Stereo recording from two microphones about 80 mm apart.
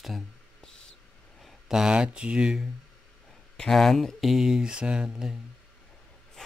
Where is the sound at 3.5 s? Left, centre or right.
Centre.